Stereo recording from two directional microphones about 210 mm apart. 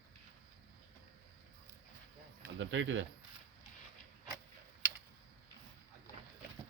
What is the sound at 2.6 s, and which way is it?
Speech, 65° right (ahead or behind).